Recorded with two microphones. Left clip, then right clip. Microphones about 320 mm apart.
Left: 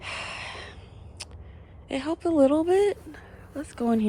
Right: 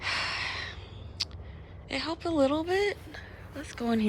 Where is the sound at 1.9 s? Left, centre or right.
Centre.